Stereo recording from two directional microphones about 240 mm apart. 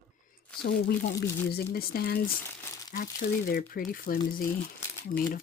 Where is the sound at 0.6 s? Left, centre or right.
Left.